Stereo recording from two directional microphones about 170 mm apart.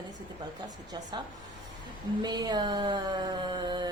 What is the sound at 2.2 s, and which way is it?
A woman's voice, 25° right (ahead or behind).